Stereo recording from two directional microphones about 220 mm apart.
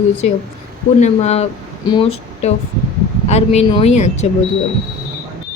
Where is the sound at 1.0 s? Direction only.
30° left (ahead or behind).